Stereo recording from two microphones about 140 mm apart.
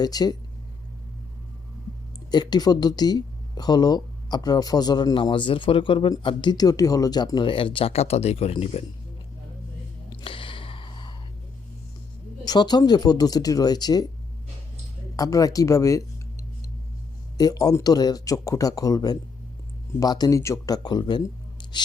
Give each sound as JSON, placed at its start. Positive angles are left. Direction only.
{"t": 0.0, "sound": "speech", "side_deg": 25}
{"t": 2.3, "sound": "speech", "side_deg": 30}
{"t": 10.1, "sound": "a sound", "side_deg": 35}
{"t": 12.5, "sound": "speech", "side_deg": 30}
{"t": 15.1, "sound": "speech", "side_deg": 25}
{"t": 17.3, "sound": "speech", "side_deg": 25}
{"t": 21.6, "sound": "scissors", "side_deg": 35}